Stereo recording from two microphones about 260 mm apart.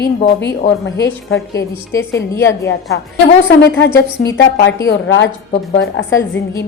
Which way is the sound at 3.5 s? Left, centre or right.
Left.